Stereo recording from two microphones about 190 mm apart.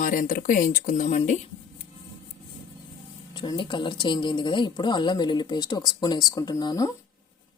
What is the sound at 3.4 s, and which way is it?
Speech, 25° left (ahead or behind).